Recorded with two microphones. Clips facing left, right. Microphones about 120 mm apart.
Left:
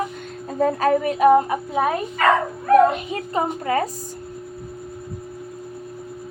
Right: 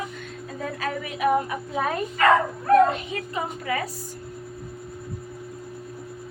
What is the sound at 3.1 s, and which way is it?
Speech, 35° left (ahead or behind).